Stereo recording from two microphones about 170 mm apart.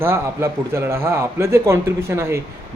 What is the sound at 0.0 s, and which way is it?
A man's voice, 15° right (ahead or behind).